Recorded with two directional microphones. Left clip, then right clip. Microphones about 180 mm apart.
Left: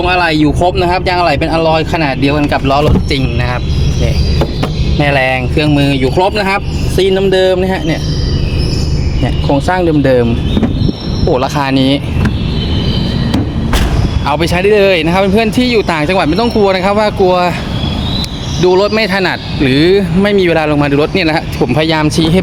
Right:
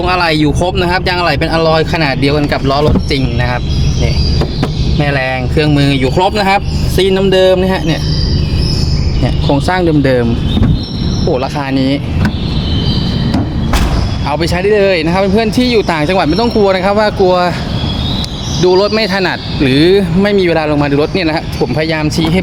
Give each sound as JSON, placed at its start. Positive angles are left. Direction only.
{"t": 0.0, "sound": "speech", "side_deg": -10}
{"t": 4.9, "sound": "speech", "side_deg": 5}
{"t": 5.5, "sound": "speech", "side_deg": -10}
{"t": 9.5, "sound": "speech", "side_deg": -10}
{"t": 11.3, "sound": "speech", "side_deg": 15}
{"t": 14.3, "sound": "speech", "side_deg": 15}
{"t": 18.6, "sound": "speech", "side_deg": 0}